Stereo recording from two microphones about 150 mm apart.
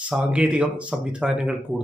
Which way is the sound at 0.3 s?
5° right (ahead or behind).